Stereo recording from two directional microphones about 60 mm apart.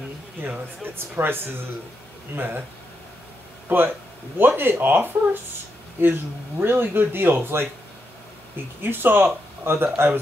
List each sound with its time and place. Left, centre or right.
0.4 s speech: right
3.6 s speech: right
6.6 s speech: right
8.8 s speech: right